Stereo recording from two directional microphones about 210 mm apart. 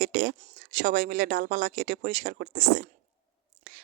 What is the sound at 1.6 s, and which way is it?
Speech, 55° right (ahead or behind).